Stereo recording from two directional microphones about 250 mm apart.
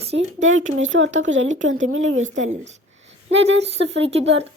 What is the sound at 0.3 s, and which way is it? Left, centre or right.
Speech, right.